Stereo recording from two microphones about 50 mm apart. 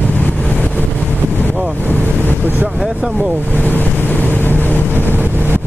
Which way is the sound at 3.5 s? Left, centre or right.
Left.